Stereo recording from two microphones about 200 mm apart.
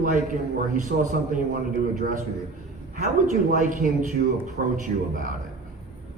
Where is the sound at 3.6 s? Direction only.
40° right (ahead or behind).